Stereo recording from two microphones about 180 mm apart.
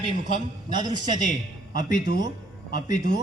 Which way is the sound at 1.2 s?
40° left (ahead or behind).